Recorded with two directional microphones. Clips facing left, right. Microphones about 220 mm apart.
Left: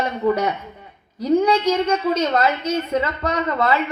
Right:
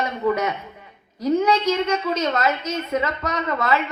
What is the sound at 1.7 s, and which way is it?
A woman's voice, 35° left (ahead or behind).